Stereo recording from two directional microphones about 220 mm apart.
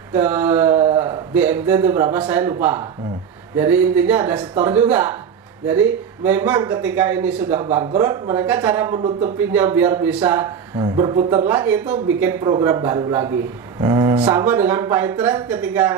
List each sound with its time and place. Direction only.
0.1 s mantra: 10° right (ahead or behind)
0.9 s a man's voice: 10° right (ahead or behind)
13.7 s a sound: 15° right (ahead or behind)
14.3 s a man's voice: 10° right (ahead or behind)